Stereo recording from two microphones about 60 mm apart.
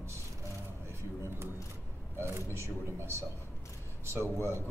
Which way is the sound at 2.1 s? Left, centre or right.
Right.